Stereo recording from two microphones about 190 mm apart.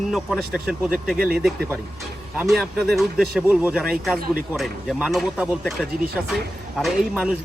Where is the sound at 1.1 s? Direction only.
50° right (ahead or behind).